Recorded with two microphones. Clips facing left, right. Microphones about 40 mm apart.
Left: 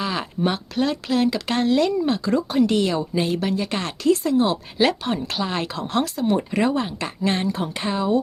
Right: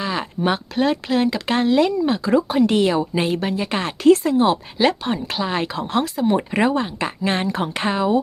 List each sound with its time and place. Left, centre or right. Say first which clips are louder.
0.0 s a sound: right 1 dB; centre
0.4 s speech: right 3 dB; right
3.6 s speech: right 2 dB; right
4.0 s speech: right 5 dB; right
4.8 s speech: left 2 dB; centre
6.3 s speech: right 2 dB; right